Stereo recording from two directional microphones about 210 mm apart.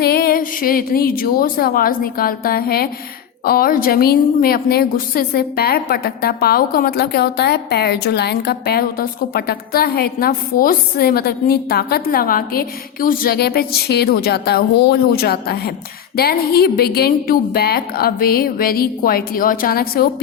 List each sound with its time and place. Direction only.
0.0 s a woman's voice: 45° left (ahead or behind)